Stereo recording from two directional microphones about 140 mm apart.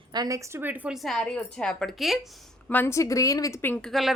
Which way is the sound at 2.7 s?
15° left (ahead or behind).